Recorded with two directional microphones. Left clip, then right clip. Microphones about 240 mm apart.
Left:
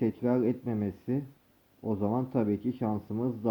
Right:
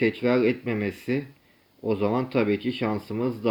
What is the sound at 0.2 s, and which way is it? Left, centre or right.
Speech, centre.